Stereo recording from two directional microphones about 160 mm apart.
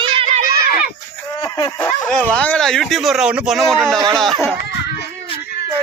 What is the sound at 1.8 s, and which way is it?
Speech, 5° left (ahead or behind).